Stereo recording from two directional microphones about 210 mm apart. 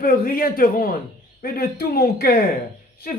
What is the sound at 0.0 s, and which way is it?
A woman's voice, 45° left (ahead or behind).